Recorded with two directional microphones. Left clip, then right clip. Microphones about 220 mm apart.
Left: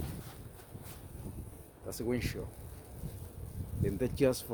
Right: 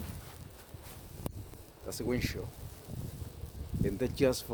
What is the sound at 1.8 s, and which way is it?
Speech, 10° right (ahead or behind).